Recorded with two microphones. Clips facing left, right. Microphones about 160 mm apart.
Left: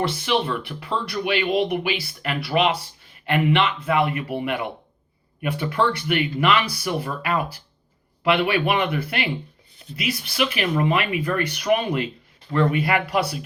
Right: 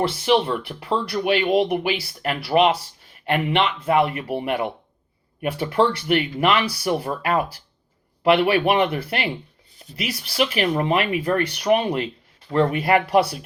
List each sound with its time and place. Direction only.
0.3 s speech: 40° right (ahead or behind)
3.8 s speech: 40° right (ahead or behind)